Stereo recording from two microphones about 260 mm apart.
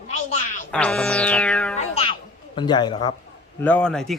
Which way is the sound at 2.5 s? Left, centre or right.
Centre.